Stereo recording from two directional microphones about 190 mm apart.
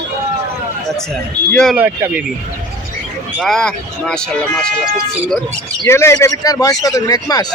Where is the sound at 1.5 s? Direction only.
5° left (ahead or behind).